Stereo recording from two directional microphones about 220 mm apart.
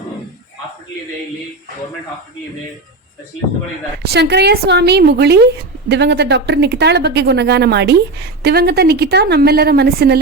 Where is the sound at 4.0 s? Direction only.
50° right (ahead or behind).